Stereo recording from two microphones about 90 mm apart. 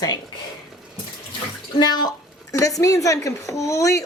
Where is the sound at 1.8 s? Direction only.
50° left (ahead or behind).